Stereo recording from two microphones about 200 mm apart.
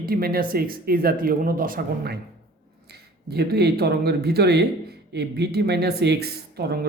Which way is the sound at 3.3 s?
55° right (ahead or behind).